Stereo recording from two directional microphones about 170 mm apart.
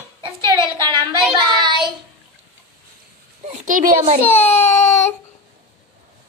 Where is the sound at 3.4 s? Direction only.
45° right (ahead or behind).